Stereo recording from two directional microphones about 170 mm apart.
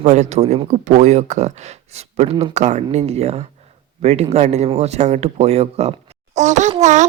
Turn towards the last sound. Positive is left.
turn(degrees=-45)  # may be behind; listen again after turning